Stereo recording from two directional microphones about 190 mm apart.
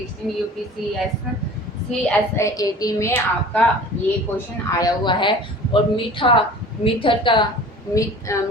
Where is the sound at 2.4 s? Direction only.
15° left (ahead or behind).